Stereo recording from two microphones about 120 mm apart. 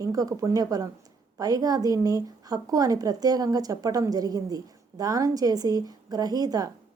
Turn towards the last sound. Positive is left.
turn(degrees=-30)  # may be behind; listen again after turning